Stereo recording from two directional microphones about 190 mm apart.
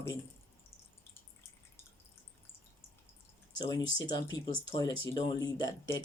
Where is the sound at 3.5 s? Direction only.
20° left (ahead or behind).